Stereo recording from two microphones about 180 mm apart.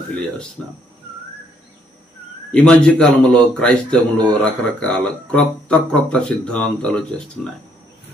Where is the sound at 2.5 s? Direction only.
5° left (ahead or behind).